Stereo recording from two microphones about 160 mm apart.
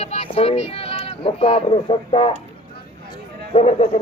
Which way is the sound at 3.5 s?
40° left (ahead or behind).